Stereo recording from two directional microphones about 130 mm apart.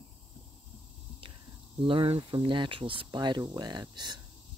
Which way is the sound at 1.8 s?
45° right (ahead or behind).